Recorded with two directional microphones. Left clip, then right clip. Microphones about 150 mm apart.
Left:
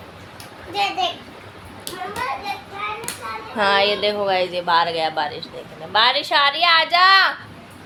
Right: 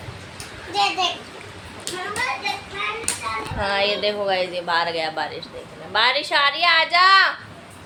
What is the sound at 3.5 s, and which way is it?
A woman's voice, 30° left (ahead or behind).